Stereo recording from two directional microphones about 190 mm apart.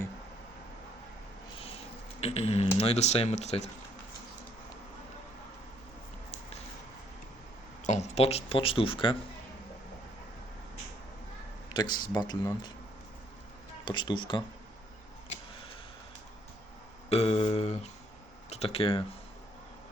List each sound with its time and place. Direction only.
2.2 s speech: 35° left (ahead or behind)
7.9 s speech: 35° left (ahead or behind)
11.7 s speech: 20° left (ahead or behind)
13.8 s speech: 25° left (ahead or behind)
17.1 s speech: 30° left (ahead or behind)